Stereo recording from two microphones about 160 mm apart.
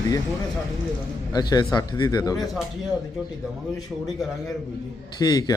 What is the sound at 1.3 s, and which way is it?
A man's voice, 25° left (ahead or behind).